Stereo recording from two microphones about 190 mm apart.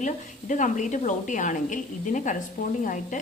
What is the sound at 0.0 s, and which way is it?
A woman's voice, 40° left (ahead or behind).